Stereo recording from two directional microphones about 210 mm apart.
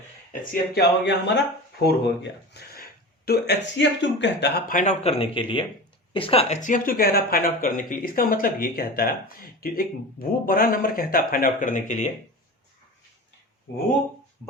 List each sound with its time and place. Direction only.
0.5 s speech: 50° left (ahead or behind); by 12.1 s 35° left (ahead or behind)